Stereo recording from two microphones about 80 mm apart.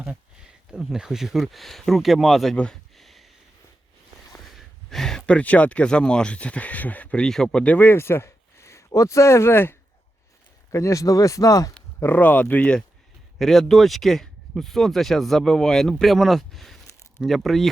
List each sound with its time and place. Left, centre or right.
0.0 s speech: centre
2.9 s a sound: centre
4.5 s speech: centre
7.3 s speech: centre
7.8 s speech: left
11.9 s speech: left
13.4 s speech: centre